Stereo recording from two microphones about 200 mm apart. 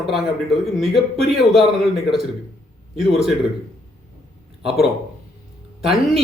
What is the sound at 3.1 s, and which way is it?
Speech, centre (ahead or behind).